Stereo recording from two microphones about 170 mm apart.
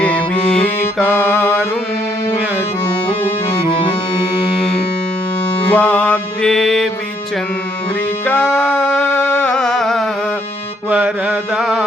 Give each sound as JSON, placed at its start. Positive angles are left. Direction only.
{"t": 0.0, "sound": "music", "side_deg": 5}
{"t": 5.7, "sound": "music", "side_deg": 10}
{"t": 8.3, "sound": "music", "side_deg": 10}
{"t": 10.8, "sound": "mantra", "side_deg": -5}